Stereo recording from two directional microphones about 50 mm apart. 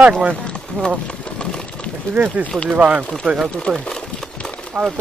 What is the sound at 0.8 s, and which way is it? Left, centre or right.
Speech, left.